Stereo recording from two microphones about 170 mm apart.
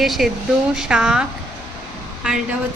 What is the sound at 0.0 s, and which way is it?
A woman's voice, centre (ahead or behind).